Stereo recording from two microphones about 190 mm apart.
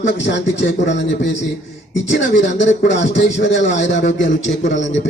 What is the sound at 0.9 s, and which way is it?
Speech, 75° left (ahead or behind).